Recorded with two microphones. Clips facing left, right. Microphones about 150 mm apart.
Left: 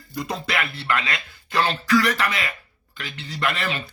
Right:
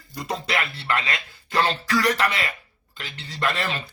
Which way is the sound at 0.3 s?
30° right (ahead or behind).